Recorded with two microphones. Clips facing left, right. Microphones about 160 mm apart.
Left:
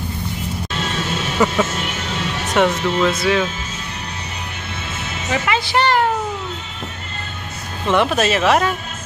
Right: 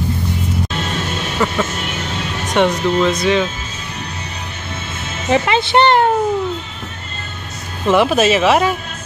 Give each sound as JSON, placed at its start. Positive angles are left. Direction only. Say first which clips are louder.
{"t": 1.4, "sound": "speech", "louder": "left 2 dB", "side_deg": 15}
{"t": 2.5, "sound": "speech", "louder": "right 2 dB", "side_deg": 5}
{"t": 5.3, "sound": "speech", "louder": "right 5 dB", "side_deg": -25}
{"t": 7.8, "sound": "speech", "louder": "right 4 dB", "side_deg": -5}